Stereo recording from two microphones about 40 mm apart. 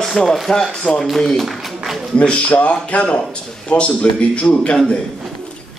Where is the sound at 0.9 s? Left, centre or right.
Left.